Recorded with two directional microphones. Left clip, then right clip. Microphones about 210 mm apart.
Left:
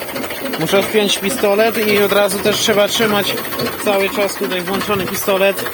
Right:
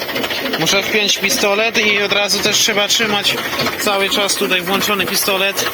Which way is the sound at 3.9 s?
Centre (ahead or behind).